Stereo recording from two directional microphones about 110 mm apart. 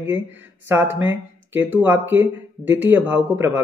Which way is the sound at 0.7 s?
20° right (ahead or behind).